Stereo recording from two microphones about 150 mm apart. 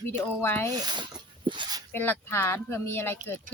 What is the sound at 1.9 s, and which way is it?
Speech, 15° left (ahead or behind).